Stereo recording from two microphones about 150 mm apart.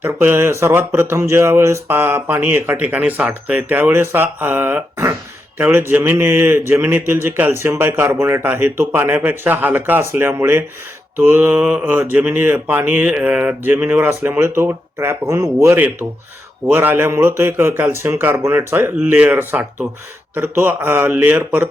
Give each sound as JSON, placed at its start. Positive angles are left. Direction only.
{"t": 0.0, "sound": "speech", "side_deg": -15}